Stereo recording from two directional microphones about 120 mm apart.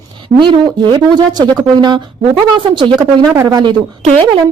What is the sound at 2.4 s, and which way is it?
Speech, 40° right (ahead or behind).